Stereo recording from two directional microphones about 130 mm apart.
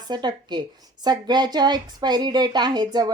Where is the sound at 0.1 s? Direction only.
35° right (ahead or behind).